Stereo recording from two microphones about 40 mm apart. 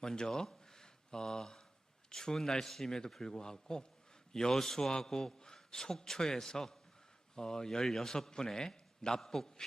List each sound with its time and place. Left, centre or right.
0.0 s a man's voice: centre